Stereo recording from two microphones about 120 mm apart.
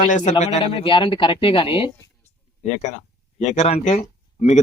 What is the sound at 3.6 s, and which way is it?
Speech, 85° left.